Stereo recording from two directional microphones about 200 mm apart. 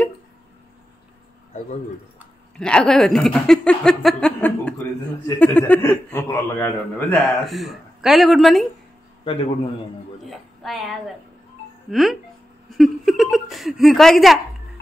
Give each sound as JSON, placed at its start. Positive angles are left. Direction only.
{"t": 2.5, "sound": "a man's voice", "side_deg": 5}
{"t": 7.2, "sound": "speech", "side_deg": 0}
{"t": 9.2, "sound": "a man's voice", "side_deg": 30}
{"t": 10.2, "sound": "a woman's voice", "side_deg": 0}